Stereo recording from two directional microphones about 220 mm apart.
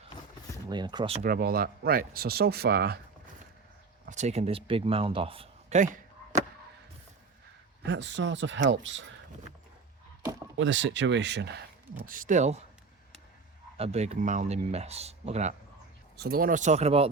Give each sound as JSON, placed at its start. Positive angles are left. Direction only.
{"t": 0.7, "sound": "speech", "side_deg": -20}
{"t": 1.2, "sound": "speech", "side_deg": -40}
{"t": 4.0, "sound": "speech", "side_deg": -30}
{"t": 7.9, "sound": "speech", "side_deg": -55}
{"t": 10.6, "sound": "speech", "side_deg": -60}
{"t": 12.0, "sound": "speech", "side_deg": -40}
{"t": 13.7, "sound": "speech", "side_deg": -30}
{"t": 16.1, "sound": "speech", "side_deg": -45}